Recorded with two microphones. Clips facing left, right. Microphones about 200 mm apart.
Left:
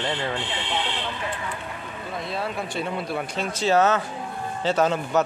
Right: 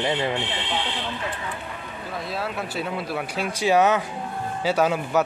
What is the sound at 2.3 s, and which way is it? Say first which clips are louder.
Speech: even; centre (ahead or behind).